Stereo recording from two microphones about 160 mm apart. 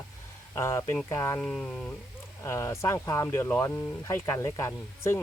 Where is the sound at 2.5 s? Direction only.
20° left (ahead or behind).